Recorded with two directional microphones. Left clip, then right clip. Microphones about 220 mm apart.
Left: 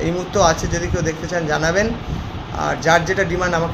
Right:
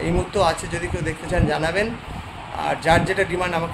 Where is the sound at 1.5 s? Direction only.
20° right (ahead or behind).